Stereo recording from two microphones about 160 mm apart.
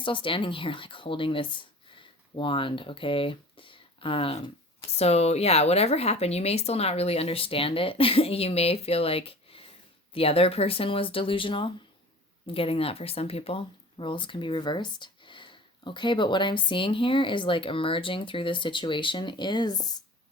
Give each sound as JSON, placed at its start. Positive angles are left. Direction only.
{"t": 0.0, "sound": "speech", "side_deg": 30}